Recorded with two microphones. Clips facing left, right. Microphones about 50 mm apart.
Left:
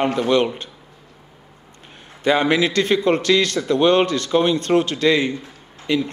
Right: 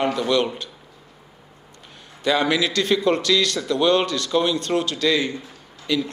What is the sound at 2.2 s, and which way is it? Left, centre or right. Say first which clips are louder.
A man's voice: left 3 dB; left.